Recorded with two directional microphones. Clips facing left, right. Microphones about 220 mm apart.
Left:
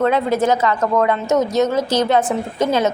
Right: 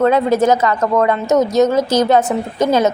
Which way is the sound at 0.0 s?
40° right (ahead or behind).